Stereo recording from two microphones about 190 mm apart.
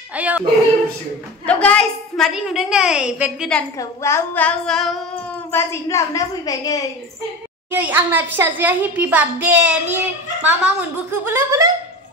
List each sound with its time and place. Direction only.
0.1 s a child's voice: 5° right (ahead or behind)
1.4 s a woman's voice: 5° left (ahead or behind)
3.7 s speech: 15° left (ahead or behind)
5.5 s speech: 15° left (ahead or behind)
7.7 s a child's voice: 10° right (ahead or behind)